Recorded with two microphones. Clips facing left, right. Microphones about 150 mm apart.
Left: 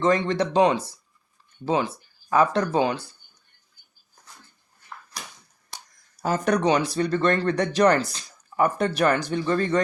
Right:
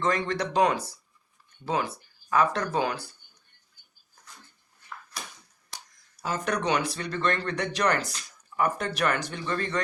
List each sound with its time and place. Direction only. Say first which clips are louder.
0.0 s speech: left 6 dB; 30° left (ahead or behind)
6.2 s speech: left 6 dB; 35° left (ahead or behind)